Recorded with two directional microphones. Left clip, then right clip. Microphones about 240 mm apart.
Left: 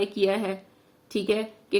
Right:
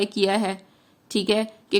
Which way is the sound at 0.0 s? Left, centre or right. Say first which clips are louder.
Right 2 dB; right.